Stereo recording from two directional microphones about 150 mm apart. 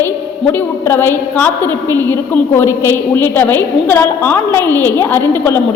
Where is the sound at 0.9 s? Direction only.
15° left (ahead or behind).